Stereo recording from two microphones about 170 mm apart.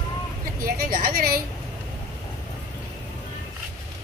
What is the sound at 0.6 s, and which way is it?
Speech, 60° right (ahead or behind).